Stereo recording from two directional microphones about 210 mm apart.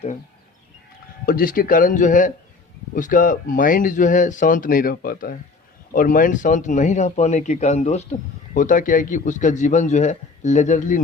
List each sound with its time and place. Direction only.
1.2 s speech: 45° left (ahead or behind)